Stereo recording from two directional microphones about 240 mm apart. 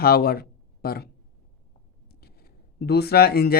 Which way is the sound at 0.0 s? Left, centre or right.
Left.